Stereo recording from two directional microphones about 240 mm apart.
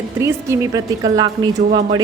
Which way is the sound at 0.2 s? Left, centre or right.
Centre.